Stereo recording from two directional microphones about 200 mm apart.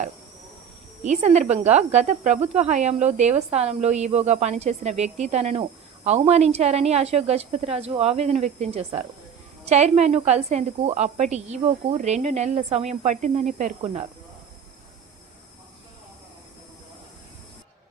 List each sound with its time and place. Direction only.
1.0 s speech: 35° right (ahead or behind)